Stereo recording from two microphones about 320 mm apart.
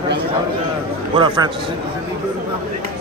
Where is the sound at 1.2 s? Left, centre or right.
Centre.